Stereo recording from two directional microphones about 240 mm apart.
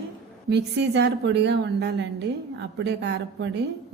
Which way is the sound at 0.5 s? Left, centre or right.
Right.